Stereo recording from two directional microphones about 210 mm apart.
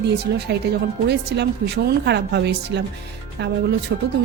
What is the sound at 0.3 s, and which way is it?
Speech, 50° right (ahead or behind).